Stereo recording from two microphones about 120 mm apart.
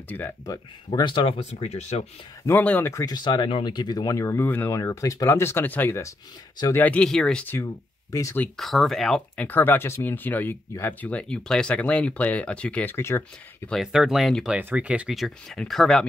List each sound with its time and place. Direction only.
0.1 s speech: 15° left (ahead or behind)
0.9 s speech: 40° left (ahead or behind)
1.4 s speech: 70° left (ahead or behind)
2.4 s speech: 15° left (ahead or behind)
2.9 s speech: 30° left (ahead or behind); by 7.4 s 5° left (ahead or behind)
7.6 s speech: 25° left (ahead or behind)
8.5 s speech: centre (ahead or behind)
9.5 s speech: 15° left (ahead or behind)
13.7 s speech: centre (ahead or behind)
14.6 s speech: 15° right (ahead or behind); by 16.1 s 5° left (ahead or behind)